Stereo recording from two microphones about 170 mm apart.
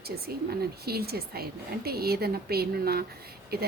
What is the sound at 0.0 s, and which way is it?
A woman's voice, 65° right (ahead or behind).